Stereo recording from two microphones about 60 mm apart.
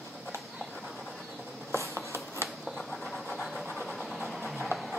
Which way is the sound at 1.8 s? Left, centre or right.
Right.